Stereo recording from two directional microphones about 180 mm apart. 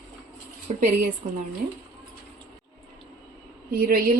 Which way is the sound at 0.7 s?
40° right (ahead or behind).